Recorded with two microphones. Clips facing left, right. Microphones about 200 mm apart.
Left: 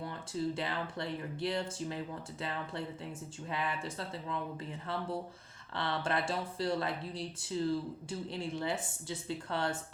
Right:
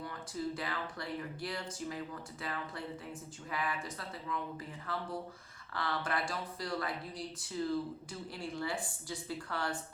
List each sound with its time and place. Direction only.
0.0 s speech: 25° left (ahead or behind)